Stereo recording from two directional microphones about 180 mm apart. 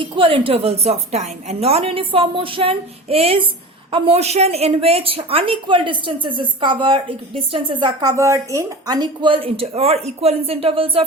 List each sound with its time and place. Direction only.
0.0 s a woman's voice: 30° right (ahead or behind)